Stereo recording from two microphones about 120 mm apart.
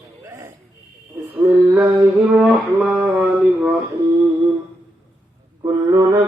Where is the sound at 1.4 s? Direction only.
15° right (ahead or behind).